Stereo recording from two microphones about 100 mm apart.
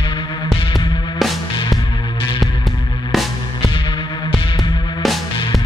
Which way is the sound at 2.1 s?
65° left (ahead or behind).